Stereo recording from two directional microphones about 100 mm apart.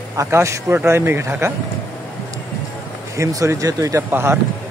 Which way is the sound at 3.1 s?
30° right (ahead or behind).